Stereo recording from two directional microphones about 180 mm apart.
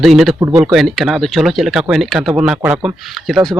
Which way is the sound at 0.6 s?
Centre (ahead or behind).